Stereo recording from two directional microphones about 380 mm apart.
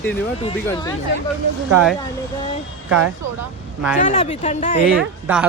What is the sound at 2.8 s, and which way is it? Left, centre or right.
Speech, right.